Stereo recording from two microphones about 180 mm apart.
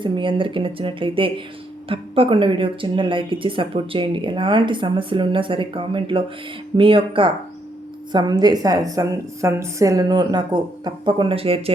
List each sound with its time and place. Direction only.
0.0 s speech: 25° right (ahead or behind)